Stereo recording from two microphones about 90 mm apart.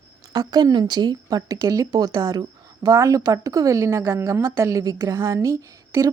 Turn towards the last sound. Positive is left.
turn(degrees=-40)  # may be behind; listen again after turning